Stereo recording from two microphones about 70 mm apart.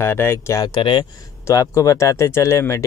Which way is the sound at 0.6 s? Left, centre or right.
Left.